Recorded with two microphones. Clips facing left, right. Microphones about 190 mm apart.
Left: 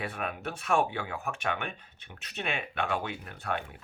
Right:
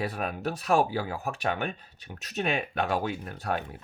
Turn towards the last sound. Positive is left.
turn(degrees=-40)  # may be behind; listen again after turning